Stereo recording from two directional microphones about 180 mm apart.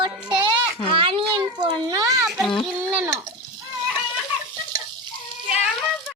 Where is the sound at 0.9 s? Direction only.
30° right (ahead or behind).